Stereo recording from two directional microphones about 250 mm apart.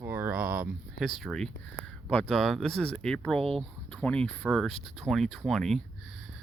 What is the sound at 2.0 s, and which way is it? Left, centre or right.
Speech, centre.